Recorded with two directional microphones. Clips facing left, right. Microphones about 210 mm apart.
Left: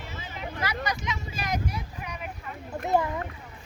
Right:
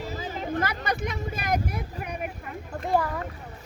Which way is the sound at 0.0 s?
40° right (ahead or behind).